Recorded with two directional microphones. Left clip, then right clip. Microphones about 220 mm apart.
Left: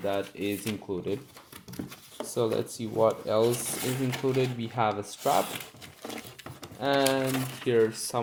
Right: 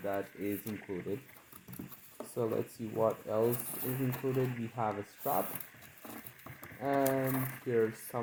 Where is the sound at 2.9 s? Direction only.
35° left (ahead or behind).